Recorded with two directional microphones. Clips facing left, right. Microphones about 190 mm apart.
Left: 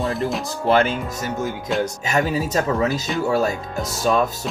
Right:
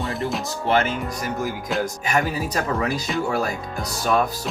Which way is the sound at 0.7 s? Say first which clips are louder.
Left 3 dB; 30° left (ahead or behind).